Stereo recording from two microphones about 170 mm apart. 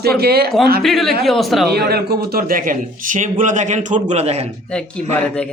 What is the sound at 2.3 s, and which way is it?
A man's voice, 55° right (ahead or behind).